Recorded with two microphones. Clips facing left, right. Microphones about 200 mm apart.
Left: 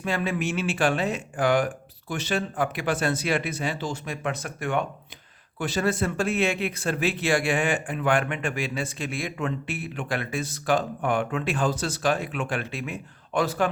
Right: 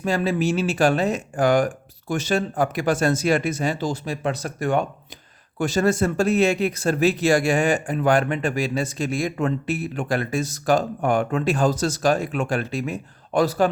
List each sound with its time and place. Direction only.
0.0 s speech: 40° right (ahead or behind)